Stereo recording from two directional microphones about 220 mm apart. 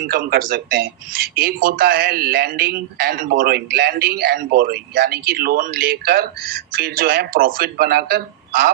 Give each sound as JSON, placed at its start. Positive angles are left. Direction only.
{"t": 0.1, "sound": "speech", "side_deg": -40}